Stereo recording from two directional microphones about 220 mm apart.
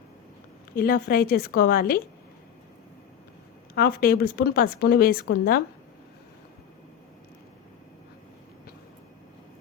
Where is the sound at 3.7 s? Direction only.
40° left (ahead or behind).